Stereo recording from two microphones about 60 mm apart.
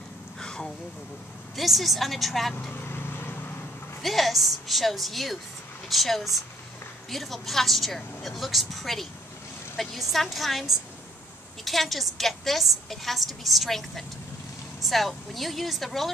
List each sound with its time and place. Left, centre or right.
0.4 s a sound: centre
1.6 s a woman's voice: centre
2.7 s vehicle: left
4.0 s a woman's voice: centre